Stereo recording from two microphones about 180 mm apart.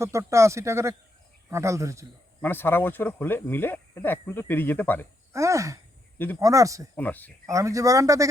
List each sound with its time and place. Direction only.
0.0 s speech: 15° right (ahead or behind)
2.4 s speech: 10° left (ahead or behind)
5.3 s speech: 15° right (ahead or behind)
6.9 s speech: 10° left (ahead or behind)
7.5 s speech: 15° right (ahead or behind)